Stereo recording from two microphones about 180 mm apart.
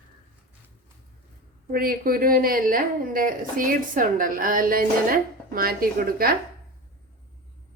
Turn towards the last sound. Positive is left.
turn(degrees=-55)  # may be behind; listen again after turning